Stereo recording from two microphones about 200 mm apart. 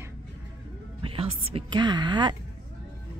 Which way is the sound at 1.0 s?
30° right (ahead or behind).